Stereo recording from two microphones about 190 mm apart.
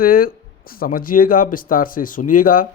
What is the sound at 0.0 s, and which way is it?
Speech, 50° left (ahead or behind).